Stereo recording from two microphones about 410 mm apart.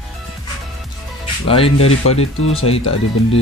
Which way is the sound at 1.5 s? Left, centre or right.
Centre.